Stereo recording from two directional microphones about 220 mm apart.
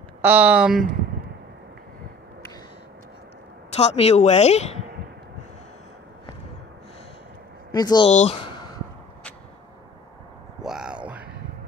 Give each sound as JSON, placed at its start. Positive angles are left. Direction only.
{"t": 0.2, "sound": "speech", "side_deg": -5}
{"t": 3.7, "sound": "speech", "side_deg": 30}
{"t": 7.7, "sound": "speech", "side_deg": 20}
{"t": 8.1, "sound": "speech", "side_deg": 30}
{"t": 10.6, "sound": "a sound", "side_deg": -5}